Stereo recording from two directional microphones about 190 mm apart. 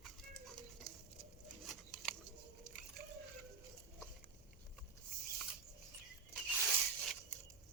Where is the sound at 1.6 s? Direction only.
Centre (ahead or behind).